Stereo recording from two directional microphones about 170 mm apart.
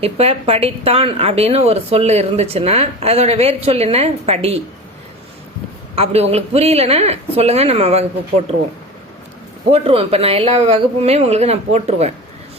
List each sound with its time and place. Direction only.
0.0 s a woman's voice: 35° right (ahead or behind)
6.0 s a woman's voice: 35° right (ahead or behind)
9.6 s a woman's voice: 35° right (ahead or behind)